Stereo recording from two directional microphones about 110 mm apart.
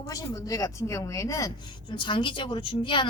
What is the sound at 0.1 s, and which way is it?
A woman's voice, 30° left (ahead or behind).